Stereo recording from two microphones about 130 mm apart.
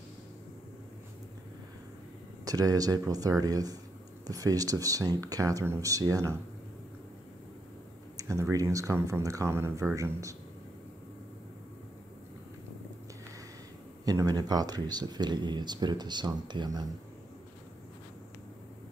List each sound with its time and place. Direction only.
2.4 s speech: 25° right (ahead or behind)
8.2 s speech: 25° right (ahead or behind)
14.0 s speech: 30° right (ahead or behind)